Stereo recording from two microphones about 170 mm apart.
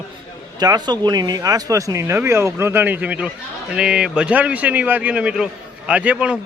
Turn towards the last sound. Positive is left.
turn(degrees=-10)  # may be behind; listen again after turning